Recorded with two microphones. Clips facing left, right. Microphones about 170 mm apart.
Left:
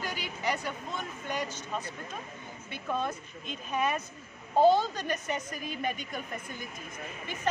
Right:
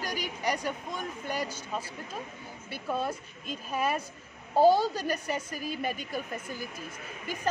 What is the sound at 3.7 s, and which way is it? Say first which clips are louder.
Speech: even; 35° right (ahead or behind).